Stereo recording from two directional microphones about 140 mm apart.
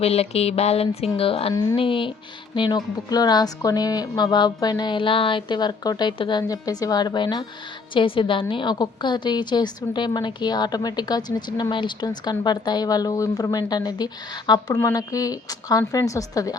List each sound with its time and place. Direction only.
0.0 s a woman's voice: 45° left (ahead or behind); by 16.6 s 25° left (ahead or behind)